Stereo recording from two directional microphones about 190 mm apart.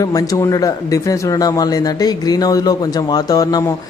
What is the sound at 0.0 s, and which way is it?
Speech, 20° left (ahead or behind).